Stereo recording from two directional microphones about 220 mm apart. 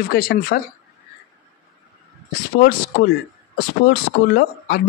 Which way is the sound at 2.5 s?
45° left (ahead or behind).